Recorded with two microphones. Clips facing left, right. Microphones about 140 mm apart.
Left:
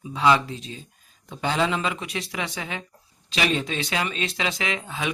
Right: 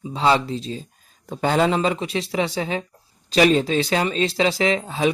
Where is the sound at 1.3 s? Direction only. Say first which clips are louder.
Right 5 dB; 45° right (ahead or behind).